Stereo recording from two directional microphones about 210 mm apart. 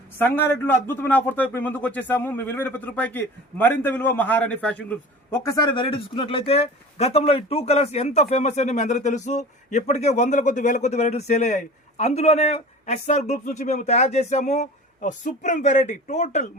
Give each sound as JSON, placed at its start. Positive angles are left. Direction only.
{"t": 0.2, "sound": "speech", "side_deg": 10}